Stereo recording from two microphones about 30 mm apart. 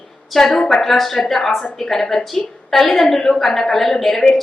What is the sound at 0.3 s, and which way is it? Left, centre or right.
A woman's voice, centre.